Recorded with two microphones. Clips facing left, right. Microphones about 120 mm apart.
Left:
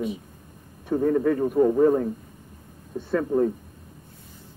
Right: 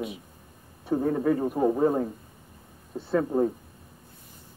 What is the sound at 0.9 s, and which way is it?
Speech, 15° right (ahead or behind).